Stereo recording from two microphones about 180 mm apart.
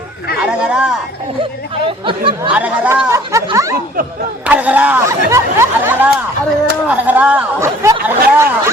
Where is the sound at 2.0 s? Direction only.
30° right (ahead or behind).